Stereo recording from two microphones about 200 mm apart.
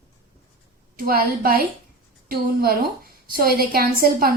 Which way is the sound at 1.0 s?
50° right (ahead or behind).